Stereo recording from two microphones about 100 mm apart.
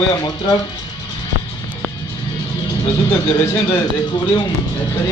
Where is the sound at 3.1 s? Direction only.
25° left (ahead or behind).